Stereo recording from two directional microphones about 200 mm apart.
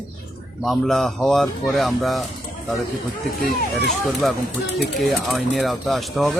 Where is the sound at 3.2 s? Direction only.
50° left (ahead or behind).